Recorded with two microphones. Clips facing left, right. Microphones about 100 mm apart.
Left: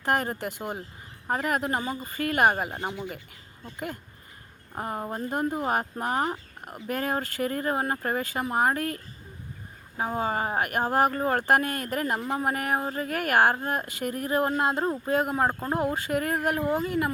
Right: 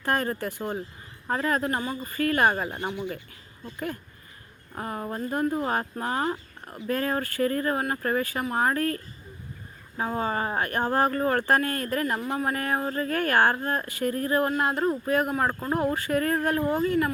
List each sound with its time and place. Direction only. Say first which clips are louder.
0.0 s speech: even; 20° left (ahead or behind)
4.7 s speech: even; 20° left (ahead or behind)
10.0 s speech: even; 15° left (ahead or behind)